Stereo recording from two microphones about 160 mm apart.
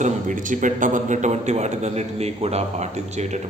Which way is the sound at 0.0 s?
55° right (ahead or behind).